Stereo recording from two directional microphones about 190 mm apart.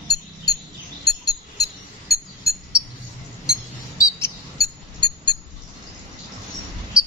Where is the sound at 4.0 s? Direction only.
15° left (ahead or behind).